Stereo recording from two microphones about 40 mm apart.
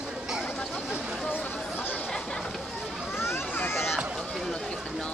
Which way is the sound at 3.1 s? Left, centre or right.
Left.